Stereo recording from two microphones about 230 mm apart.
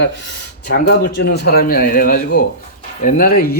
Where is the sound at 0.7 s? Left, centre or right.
Left.